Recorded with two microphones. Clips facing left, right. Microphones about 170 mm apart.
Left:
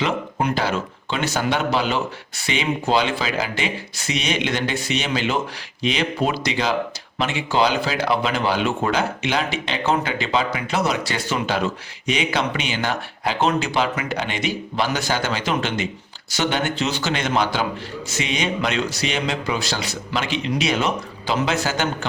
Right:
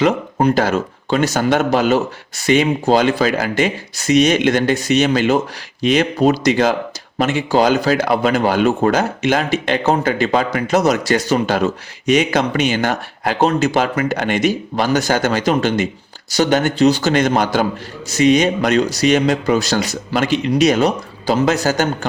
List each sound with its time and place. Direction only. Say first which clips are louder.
0.0 s speech: right 8 dB; 40° right (ahead or behind)